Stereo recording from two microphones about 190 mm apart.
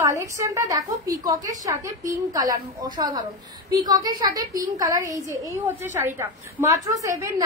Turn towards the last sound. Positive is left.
turn(degrees=-15)  # may be behind; listen again after turning